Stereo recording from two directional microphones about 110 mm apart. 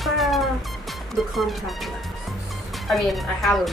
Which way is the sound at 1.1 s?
Centre (ahead or behind).